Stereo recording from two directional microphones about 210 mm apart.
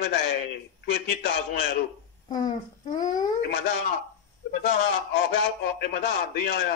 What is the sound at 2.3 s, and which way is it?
Speech, 20° left (ahead or behind).